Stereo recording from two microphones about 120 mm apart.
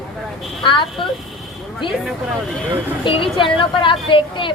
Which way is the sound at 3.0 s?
45° left (ahead or behind).